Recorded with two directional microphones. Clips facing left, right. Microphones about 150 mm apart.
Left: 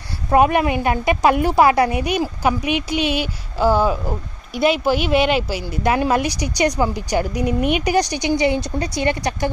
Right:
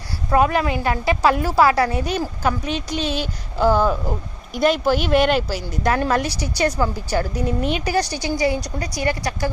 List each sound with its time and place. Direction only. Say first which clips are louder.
0.3 s a woman's voice: left 3 dB; 20° left (ahead or behind)